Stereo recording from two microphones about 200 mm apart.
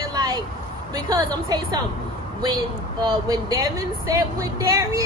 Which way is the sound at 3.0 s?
20° right (ahead or behind).